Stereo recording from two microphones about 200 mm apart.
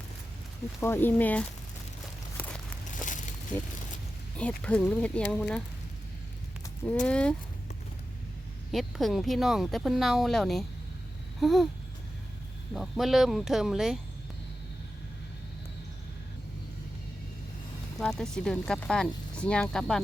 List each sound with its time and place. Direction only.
0.8 s speech: 10° left (ahead or behind)
3.0 s a sound: 40° left (ahead or behind)
4.4 s speech: 5° left (ahead or behind)
7.0 s speech: 5° left (ahead or behind)
8.7 s speech: centre (ahead or behind)
12.7 s speech: centre (ahead or behind)
18.0 s speech: 5° left (ahead or behind)